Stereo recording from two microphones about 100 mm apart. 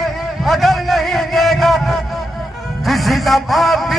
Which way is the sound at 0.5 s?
Centre (ahead or behind).